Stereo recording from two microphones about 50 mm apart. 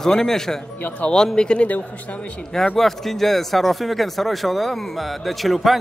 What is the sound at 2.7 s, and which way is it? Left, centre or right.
Speech, centre.